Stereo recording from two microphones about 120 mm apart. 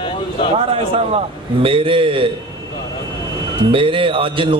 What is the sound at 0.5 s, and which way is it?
Mantra, 55° right (ahead or behind).